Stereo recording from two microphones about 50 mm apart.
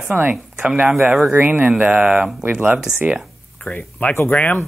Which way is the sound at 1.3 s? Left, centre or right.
Right.